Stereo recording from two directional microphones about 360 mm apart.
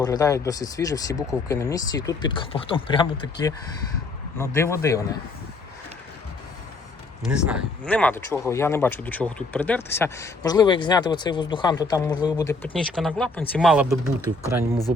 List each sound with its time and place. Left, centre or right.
0.0 s speech: centre
7.3 s speech: centre